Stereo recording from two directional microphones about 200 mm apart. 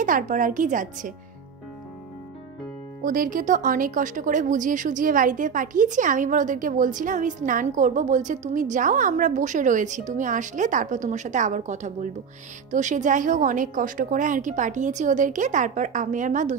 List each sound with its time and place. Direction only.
0.0 s speech: 40° right (ahead or behind)
3.0 s speech: 40° right (ahead or behind)